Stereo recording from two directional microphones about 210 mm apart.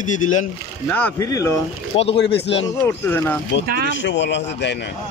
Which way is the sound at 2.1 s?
55° left (ahead or behind).